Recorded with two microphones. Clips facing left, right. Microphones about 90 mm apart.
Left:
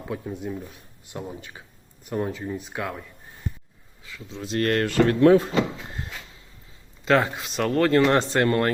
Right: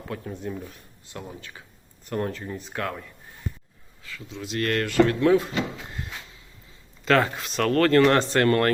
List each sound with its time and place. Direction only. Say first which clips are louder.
0.3 s speech: left 1 dB; 5° left (ahead or behind)
1.1 s speech: left 3 dB; 20° left (ahead or behind)
2.0 s speech: left 1 dB; 10° left (ahead or behind)
4.0 s speech: even; 20° left (ahead or behind)
4.4 s speech: left 3 dB; 35° left (ahead or behind)
7.0 s speech: even; 15° left (ahead or behind)